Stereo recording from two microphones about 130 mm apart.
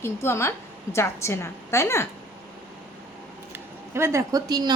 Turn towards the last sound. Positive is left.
turn(degrees=-30)  # may be behind; listen again after turning